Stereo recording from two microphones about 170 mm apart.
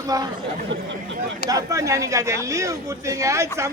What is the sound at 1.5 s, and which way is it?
Speech, 20° right (ahead or behind).